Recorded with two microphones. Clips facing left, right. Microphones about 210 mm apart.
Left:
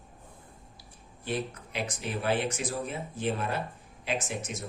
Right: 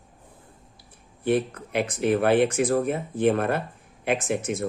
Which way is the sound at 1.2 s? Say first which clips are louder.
Right 10 dB; 55° right (ahead or behind).